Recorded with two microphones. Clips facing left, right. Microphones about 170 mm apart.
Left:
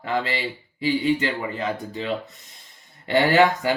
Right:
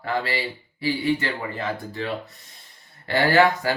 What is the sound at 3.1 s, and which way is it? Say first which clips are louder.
Speech: left 1 dB; 20° left (ahead or behind).